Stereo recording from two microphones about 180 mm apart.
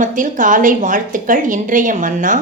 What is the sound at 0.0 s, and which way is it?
A woman's voice, 45° right (ahead or behind).